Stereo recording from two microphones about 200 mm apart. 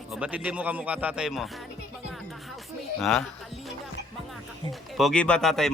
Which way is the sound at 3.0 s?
Centre (ahead or behind).